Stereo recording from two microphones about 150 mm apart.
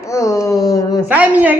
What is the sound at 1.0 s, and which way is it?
Speech, 10° right (ahead or behind).